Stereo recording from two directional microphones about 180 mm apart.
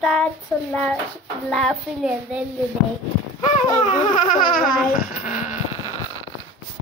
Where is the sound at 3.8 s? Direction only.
45° left (ahead or behind).